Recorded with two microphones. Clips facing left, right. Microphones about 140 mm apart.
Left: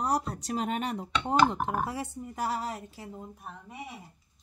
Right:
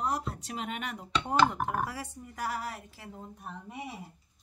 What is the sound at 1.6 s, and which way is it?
Speech, 20° left (ahead or behind).